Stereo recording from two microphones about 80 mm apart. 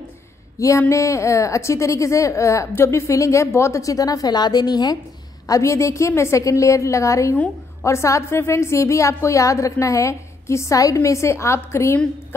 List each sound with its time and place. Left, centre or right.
0.6 s a woman's voice: left
5.5 s a woman's voice: left